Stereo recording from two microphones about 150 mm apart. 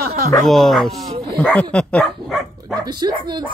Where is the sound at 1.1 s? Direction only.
45° right (ahead or behind).